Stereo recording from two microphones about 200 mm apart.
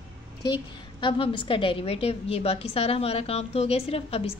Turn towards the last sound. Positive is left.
turn(degrees=30)  # may be behind; listen again after turning